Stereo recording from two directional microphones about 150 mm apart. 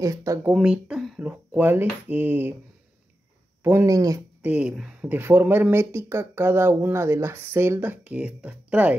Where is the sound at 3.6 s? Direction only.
20° right (ahead or behind).